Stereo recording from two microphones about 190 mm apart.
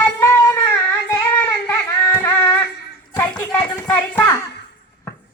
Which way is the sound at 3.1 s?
15° left (ahead or behind).